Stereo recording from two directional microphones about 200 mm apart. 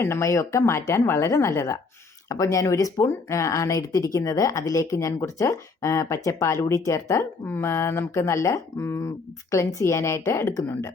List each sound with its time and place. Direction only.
0.0 s speech: 15° left (ahead or behind)